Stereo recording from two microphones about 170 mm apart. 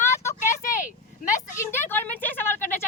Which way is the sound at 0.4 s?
45° left (ahead or behind).